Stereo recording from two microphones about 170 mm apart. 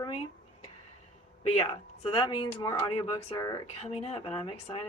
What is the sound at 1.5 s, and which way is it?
Speech, 35° left (ahead or behind).